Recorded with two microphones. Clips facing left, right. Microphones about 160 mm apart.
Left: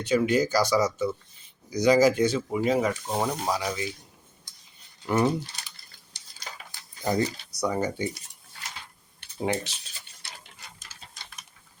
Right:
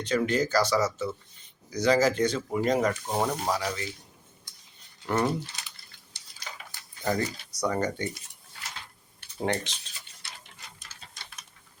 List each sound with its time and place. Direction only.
0.0 s speech: 10° left (ahead or behind)
5.0 s speech: 10° left (ahead or behind)
7.0 s speech: 20° left (ahead or behind)
7.6 s speech: 10° left (ahead or behind)
9.4 s speech: 5° left (ahead or behind)